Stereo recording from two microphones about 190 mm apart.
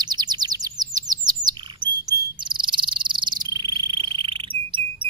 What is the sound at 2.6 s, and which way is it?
Frog, 25° right (ahead or behind).